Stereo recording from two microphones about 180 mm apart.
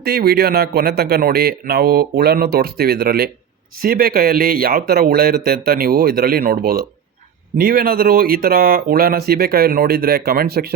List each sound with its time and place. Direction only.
0.0 s speech: 60° right (ahead or behind)